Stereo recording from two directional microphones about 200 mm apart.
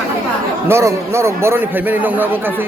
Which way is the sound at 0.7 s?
15° right (ahead or behind).